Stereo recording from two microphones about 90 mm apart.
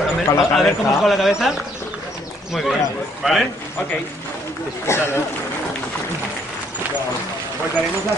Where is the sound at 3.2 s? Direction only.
10° right (ahead or behind).